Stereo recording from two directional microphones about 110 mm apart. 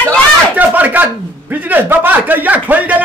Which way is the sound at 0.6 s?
15° right (ahead or behind).